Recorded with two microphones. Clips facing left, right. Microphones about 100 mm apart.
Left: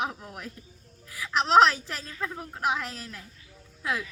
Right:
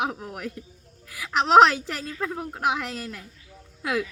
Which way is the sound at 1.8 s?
90° right.